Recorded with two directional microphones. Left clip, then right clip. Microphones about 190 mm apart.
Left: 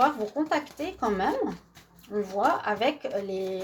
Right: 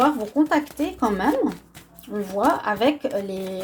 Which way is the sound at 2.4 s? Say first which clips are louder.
Right 5 dB; 40° right (ahead or behind).